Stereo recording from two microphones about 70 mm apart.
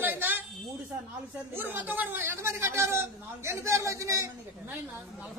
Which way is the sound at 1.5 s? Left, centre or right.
Right.